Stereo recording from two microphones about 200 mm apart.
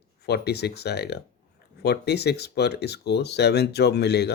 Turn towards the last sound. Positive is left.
turn(degrees=55)  # may be behind; listen again after turning